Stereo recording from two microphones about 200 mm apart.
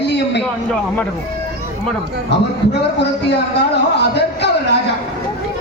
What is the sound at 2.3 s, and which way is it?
Speech, 60° left (ahead or behind).